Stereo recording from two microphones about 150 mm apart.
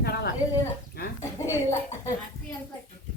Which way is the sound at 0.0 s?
90° left.